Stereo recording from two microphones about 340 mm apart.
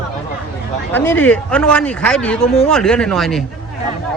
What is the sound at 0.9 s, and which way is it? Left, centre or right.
Speech, centre.